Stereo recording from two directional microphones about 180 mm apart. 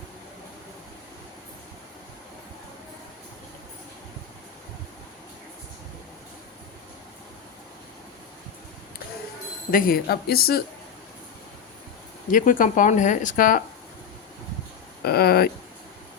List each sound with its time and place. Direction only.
9.7 s speech: 55° left (ahead or behind)
12.3 s speech: 50° left (ahead or behind)
15.0 s a sound: 60° left (ahead or behind)